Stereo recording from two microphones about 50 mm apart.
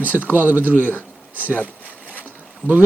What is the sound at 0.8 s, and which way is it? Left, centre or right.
Speech, left.